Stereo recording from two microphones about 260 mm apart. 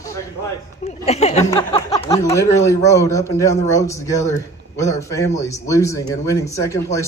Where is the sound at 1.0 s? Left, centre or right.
Left.